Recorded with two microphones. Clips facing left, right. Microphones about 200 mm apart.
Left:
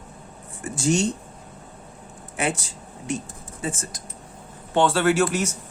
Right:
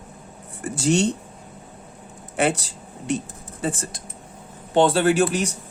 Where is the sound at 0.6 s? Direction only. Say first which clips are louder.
Right 2 dB; 35° right (ahead or behind).